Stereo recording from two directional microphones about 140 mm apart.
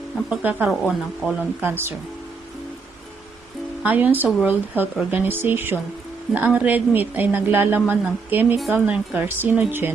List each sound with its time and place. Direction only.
0.3 s speech: 10° right (ahead or behind)
1.6 s speech: 15° right (ahead or behind)
3.8 s speech: 10° right (ahead or behind)